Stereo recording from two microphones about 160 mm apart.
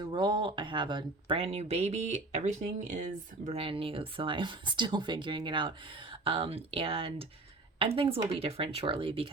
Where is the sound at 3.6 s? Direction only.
35° right (ahead or behind).